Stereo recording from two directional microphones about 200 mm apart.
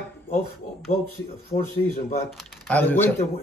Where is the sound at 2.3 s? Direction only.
Centre (ahead or behind).